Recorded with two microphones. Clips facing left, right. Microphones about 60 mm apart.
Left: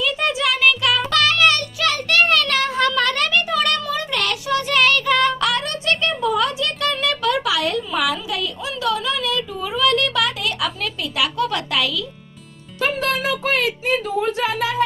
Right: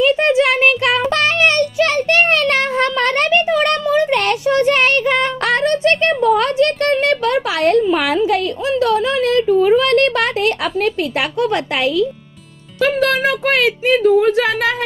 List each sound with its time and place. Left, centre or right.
0.0 s music: right
8.7 s a sound: right
12.8 s speech: right